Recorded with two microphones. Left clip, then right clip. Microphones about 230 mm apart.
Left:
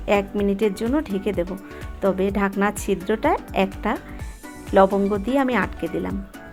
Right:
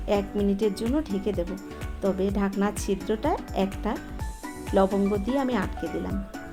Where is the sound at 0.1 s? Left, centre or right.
Left.